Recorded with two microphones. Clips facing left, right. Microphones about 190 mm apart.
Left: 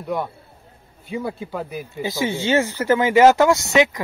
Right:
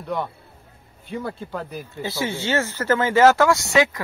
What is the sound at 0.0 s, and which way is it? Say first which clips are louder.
Speech: left 2 dB; 10° left (ahead or behind).